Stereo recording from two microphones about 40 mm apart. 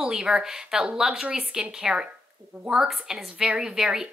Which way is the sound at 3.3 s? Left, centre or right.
Centre.